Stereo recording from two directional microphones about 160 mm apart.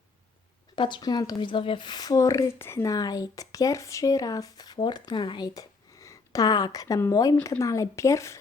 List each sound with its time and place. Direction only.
0.8 s a woman's voice: 30° left (ahead or behind)